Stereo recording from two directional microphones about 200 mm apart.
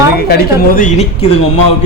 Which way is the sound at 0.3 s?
50° left (ahead or behind).